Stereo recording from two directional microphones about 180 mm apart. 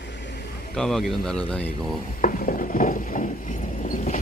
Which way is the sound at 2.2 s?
50° left (ahead or behind).